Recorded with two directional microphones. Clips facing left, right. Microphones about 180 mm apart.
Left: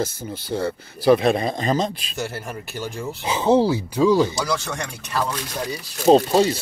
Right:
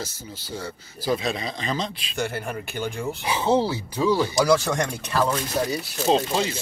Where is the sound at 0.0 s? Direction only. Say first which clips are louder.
Left 9 dB; 55° left (ahead or behind).